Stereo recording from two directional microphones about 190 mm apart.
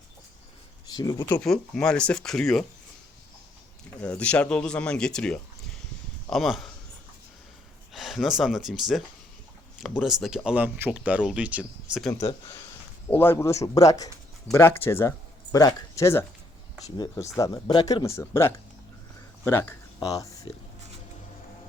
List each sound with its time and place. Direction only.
0.9 s speech: 20° left (ahead or behind)
1.4 s speech: 5° left (ahead or behind)
4.0 s speech: 5° left (ahead or behind)
7.9 s speech: centre (ahead or behind)
12.2 s speech: 20° left (ahead or behind)